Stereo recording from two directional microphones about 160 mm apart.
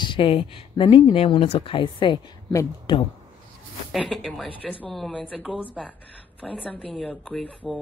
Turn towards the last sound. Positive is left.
turn(degrees=5)  # may be behind; listen again after turning